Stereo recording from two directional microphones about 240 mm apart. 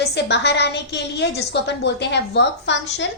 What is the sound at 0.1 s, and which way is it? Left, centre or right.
A woman's voice, left.